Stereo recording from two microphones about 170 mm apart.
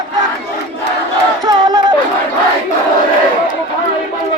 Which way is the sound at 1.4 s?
25° right (ahead or behind).